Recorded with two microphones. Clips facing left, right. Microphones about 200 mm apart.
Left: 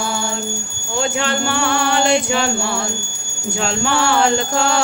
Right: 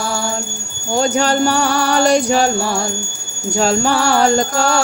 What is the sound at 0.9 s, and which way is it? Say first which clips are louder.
Music: right 5 dB; 40° right (ahead or behind).